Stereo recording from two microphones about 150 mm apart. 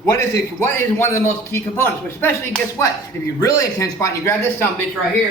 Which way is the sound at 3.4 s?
20° left (ahead or behind).